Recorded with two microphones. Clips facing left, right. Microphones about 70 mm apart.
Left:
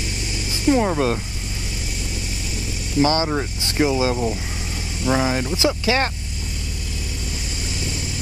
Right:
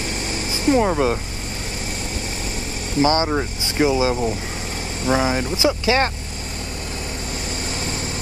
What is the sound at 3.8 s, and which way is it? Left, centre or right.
Speech, centre.